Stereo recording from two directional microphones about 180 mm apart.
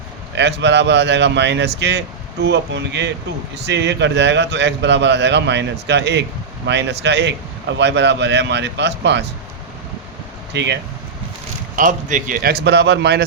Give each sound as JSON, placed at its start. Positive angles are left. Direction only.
{"t": 0.3, "sound": "speech", "side_deg": -75}
{"t": 10.5, "sound": "speech", "side_deg": -75}
{"t": 11.8, "sound": "a man's voice", "side_deg": -45}